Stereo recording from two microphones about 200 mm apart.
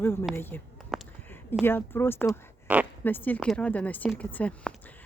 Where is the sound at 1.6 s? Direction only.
10° left (ahead or behind).